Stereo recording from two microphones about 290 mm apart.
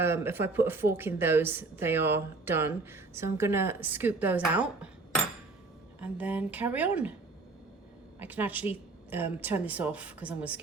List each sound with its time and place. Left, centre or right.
0.0 s a woman's voice: centre
8.2 s a woman's voice: centre